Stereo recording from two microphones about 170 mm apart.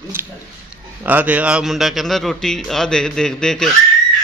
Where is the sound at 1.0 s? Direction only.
10° right (ahead or behind).